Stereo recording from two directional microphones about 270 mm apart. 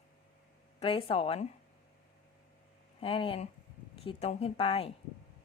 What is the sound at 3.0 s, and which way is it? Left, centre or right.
Speech, centre.